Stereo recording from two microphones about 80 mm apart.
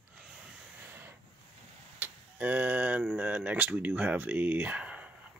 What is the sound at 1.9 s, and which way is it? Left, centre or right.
Vehicle, right.